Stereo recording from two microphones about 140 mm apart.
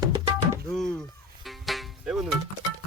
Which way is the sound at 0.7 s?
5° left (ahead or behind).